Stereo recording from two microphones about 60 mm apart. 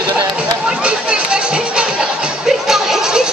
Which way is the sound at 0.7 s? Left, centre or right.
Centre.